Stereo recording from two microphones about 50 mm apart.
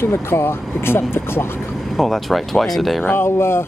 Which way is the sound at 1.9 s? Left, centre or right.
Centre.